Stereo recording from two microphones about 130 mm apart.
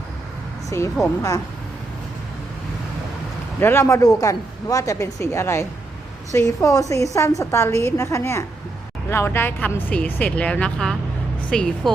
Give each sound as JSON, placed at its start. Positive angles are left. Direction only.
{"t": 0.7, "sound": "a woman's voice", "side_deg": 20}
{"t": 3.6, "sound": "a woman's voice", "side_deg": 20}